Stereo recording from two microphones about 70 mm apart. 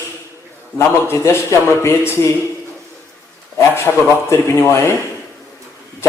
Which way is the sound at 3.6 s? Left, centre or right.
Left.